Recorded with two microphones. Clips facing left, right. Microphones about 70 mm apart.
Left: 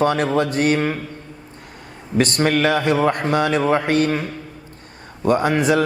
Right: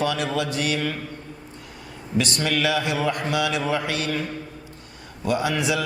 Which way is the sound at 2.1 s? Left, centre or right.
Left.